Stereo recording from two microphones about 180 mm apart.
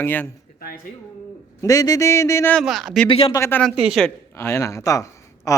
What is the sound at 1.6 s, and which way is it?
Speech, 20° left (ahead or behind).